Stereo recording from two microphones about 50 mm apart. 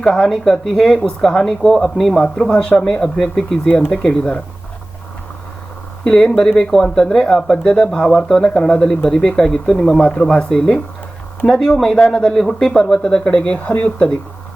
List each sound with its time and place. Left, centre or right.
0.0 s speech: centre
2.2 s speech: centre
6.1 s speech: centre
10.0 s speech: left
12.3 s speech: centre; by 14.2 s left